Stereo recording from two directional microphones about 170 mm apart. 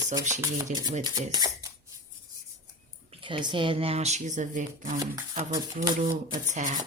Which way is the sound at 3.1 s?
30° right (ahead or behind).